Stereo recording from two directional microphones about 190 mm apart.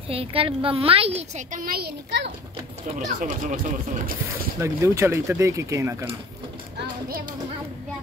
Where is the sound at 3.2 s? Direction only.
45° right (ahead or behind).